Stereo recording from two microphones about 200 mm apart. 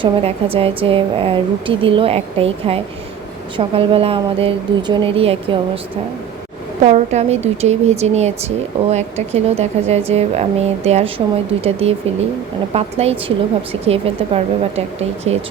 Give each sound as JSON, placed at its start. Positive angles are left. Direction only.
{"t": 0.0, "sound": "a woman's voice", "side_deg": -30}
{"t": 6.8, "sound": "speech", "side_deg": -35}